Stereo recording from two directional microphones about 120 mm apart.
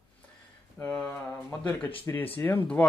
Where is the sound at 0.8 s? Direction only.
5° left (ahead or behind).